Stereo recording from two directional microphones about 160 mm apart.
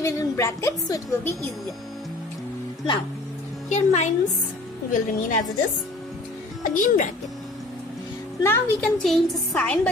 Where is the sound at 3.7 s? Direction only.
45° left (ahead or behind).